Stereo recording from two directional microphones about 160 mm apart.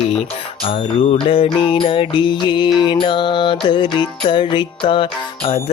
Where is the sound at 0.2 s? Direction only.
35° left (ahead or behind).